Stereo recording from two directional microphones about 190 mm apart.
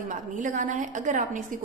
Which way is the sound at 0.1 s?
40° right (ahead or behind).